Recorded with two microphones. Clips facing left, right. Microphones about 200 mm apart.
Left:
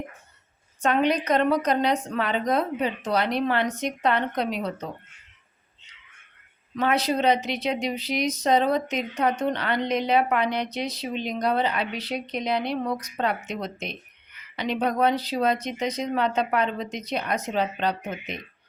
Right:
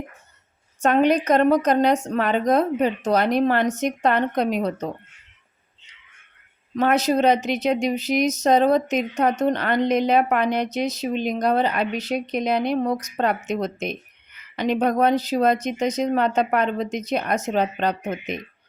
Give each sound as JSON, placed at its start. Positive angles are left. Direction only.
{"t": 0.8, "sound": "a woman's voice", "side_deg": -45}
{"t": 6.7, "sound": "a woman's voice", "side_deg": -45}